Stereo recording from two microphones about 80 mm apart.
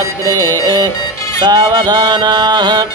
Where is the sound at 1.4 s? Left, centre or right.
Right.